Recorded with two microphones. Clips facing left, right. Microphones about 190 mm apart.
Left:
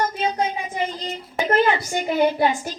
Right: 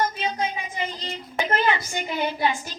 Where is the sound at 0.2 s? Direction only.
45° left (ahead or behind).